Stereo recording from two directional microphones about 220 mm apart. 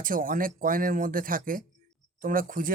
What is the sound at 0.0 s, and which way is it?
Speech, 40° right (ahead or behind).